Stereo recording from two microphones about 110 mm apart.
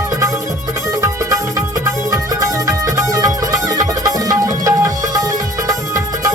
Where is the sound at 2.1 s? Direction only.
30° right (ahead or behind).